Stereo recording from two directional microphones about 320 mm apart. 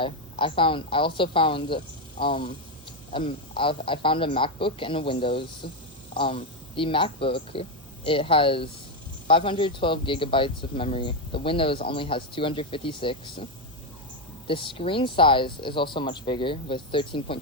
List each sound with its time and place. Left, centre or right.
0.0 s speech: centre